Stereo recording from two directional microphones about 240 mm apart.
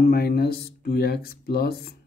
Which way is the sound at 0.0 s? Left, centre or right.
Left.